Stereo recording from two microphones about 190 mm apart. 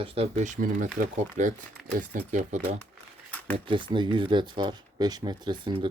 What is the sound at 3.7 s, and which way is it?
Speech, 25° right (ahead or behind).